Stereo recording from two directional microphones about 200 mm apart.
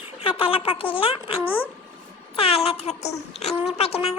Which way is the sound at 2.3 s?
30° left (ahead or behind).